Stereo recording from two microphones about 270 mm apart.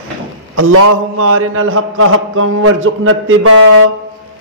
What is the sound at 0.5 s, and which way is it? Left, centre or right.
A man's voice, right.